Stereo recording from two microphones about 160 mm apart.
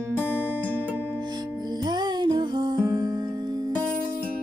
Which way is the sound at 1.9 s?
25° right (ahead or behind).